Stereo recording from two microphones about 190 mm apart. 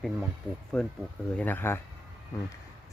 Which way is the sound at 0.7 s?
5° left (ahead or behind).